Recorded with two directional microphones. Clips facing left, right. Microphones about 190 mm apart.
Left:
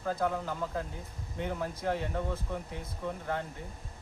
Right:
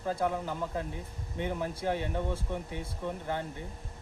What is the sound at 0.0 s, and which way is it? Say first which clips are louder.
Speech: right 1 dB; 15° right (ahead or behind).